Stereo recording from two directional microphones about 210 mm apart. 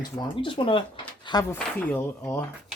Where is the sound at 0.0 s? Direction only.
25° left (ahead or behind).